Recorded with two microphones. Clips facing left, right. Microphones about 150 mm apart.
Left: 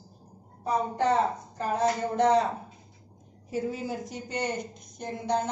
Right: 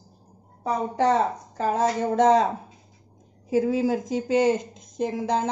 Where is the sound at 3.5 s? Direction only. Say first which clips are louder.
Right 9 dB; 90° right.